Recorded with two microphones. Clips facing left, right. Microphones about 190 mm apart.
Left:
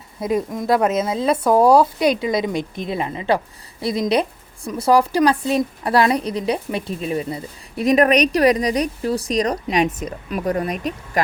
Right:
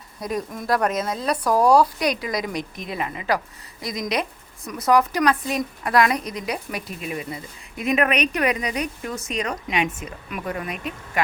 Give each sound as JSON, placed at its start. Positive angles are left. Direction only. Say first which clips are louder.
{"t": 0.2, "sound": "speech", "louder": "left 6 dB", "side_deg": 25}
{"t": 1.0, "sound": "speech", "louder": "left 6 dB", "side_deg": 5}
{"t": 1.3, "sound": "speech", "louder": "left 4 dB", "side_deg": 25}